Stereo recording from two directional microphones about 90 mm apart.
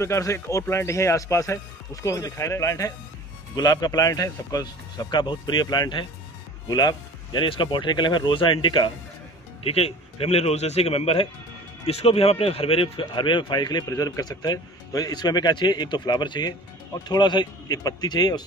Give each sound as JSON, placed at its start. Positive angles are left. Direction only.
{"t": 0.0, "sound": "speech", "side_deg": 35}
{"t": 3.5, "sound": "speech", "side_deg": 45}
{"t": 7.4, "sound": "speech", "side_deg": 65}
{"t": 9.6, "sound": "speech", "side_deg": 90}